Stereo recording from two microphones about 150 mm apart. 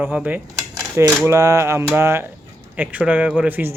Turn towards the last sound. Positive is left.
turn(degrees=-10)  # may be behind; listen again after turning